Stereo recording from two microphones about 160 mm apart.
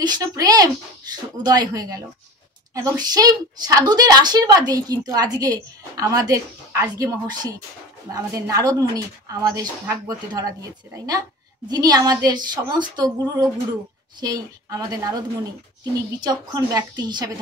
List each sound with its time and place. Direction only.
0.0 s speech: 25° right (ahead or behind)